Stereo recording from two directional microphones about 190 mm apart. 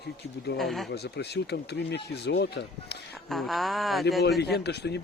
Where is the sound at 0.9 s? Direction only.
60° left (ahead or behind).